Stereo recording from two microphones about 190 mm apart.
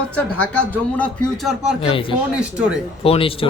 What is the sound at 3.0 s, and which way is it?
Speech, 30° left (ahead or behind).